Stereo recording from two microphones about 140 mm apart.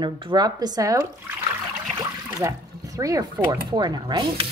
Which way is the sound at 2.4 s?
25° right (ahead or behind).